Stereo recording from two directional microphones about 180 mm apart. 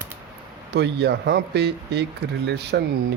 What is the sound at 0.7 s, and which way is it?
Speech, 65° right (ahead or behind).